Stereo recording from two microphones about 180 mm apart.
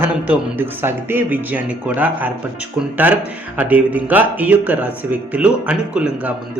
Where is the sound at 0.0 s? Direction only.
10° right (ahead or behind).